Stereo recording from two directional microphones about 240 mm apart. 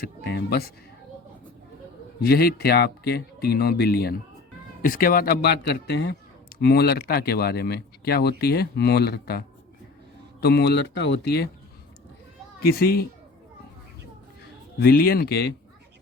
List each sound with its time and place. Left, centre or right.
0.0 s a man's voice: left
2.2 s a man's voice: left
10.4 s speech: left
12.6 s a man's voice: left
14.8 s a man's voice: left